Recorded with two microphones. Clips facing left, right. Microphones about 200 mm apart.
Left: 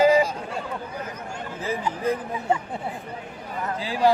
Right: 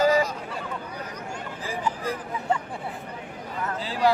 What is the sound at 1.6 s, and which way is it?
Speech, 25° left (ahead or behind).